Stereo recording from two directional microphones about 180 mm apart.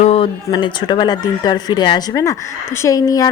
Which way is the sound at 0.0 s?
35° left (ahead or behind).